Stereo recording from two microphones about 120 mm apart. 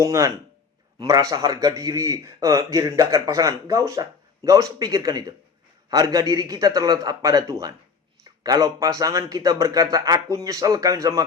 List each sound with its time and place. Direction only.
0.0 s a man's voice: 25° right (ahead or behind)